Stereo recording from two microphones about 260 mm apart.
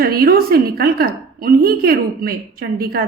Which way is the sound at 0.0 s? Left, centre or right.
Right.